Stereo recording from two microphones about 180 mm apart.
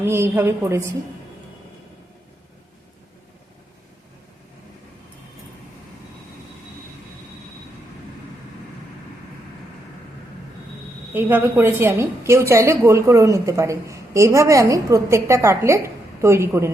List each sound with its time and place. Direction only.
0.0 s a woman's voice: 15° right (ahead or behind)
11.1 s a woman's voice: 10° right (ahead or behind)